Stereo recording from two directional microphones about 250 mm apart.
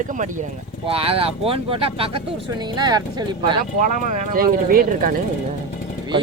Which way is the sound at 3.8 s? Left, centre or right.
Right.